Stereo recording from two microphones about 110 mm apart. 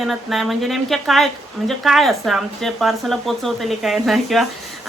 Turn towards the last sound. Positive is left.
turn(degrees=0)  # may be behind; listen again after turning